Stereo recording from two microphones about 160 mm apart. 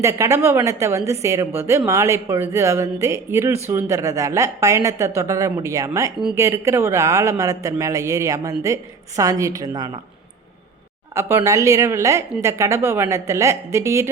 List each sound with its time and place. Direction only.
0.0 s speech: 20° right (ahead or behind)
11.1 s speech: 15° right (ahead or behind)